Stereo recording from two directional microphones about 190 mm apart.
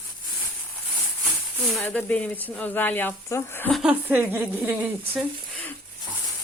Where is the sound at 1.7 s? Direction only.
5° left (ahead or behind).